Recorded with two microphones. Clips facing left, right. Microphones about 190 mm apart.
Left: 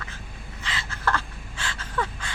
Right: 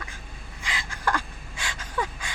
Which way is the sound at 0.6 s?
10° right (ahead or behind).